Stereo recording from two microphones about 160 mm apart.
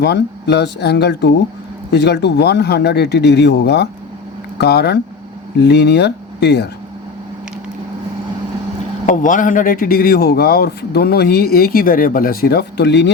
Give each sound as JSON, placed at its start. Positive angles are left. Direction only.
{"t": 0.0, "sound": "speech", "side_deg": 90}
{"t": 9.0, "sound": "a man's voice", "side_deg": 55}